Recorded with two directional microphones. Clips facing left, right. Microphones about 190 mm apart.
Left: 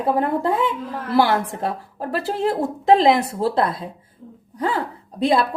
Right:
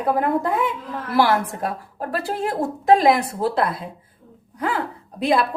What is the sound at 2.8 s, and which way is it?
A woman's voice, 25° left (ahead or behind).